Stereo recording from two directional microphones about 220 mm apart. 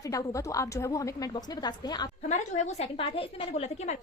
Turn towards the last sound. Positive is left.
turn(degrees=30)  # may be behind; listen again after turning